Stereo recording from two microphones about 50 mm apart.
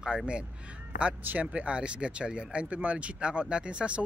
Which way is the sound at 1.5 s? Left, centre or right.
Right.